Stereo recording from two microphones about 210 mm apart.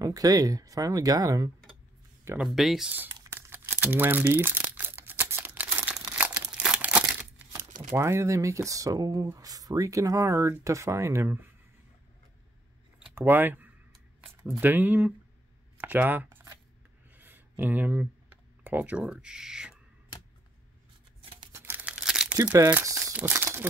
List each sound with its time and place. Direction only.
0.0 s speech: 15° right (ahead or behind)
2.2 s speech: 5° right (ahead or behind)
3.1 s crumpling: 20° right (ahead or behind)
3.3 s crumpling: 10° right (ahead or behind)
7.9 s speech: 15° right (ahead or behind)
13.1 s speech: 10° right (ahead or behind)
17.1 s computer keyboard: 10° right (ahead or behind)
21.5 s crumpling: 10° right (ahead or behind)